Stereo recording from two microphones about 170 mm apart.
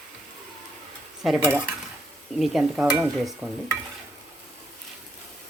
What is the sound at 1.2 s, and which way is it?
Stir, 5° right (ahead or behind).